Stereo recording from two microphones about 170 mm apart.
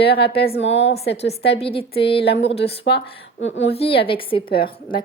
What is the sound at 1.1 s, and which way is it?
A woman's voice, 40° left (ahead or behind).